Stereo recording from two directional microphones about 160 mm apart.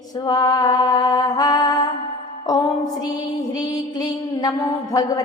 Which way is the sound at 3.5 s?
25° left (ahead or behind).